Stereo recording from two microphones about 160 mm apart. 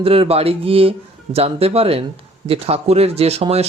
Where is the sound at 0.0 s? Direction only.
35° right (ahead or behind).